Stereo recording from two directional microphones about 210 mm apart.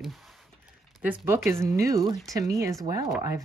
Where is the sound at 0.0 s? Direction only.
Centre (ahead or behind).